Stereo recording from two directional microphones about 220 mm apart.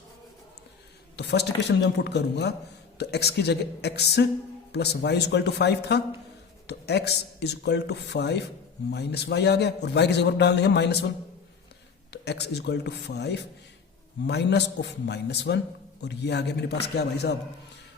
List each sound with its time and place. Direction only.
1.1 s a man's voice: 50° left (ahead or behind)
12.1 s a man's voice: 50° left (ahead or behind)